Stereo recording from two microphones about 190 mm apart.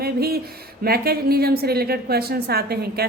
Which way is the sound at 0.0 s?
55° right (ahead or behind).